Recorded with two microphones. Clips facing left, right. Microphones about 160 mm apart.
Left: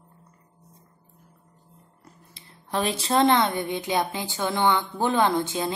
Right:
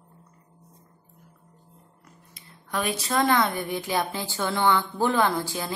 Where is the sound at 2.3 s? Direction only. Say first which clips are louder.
Left 3 dB; 30° left (ahead or behind).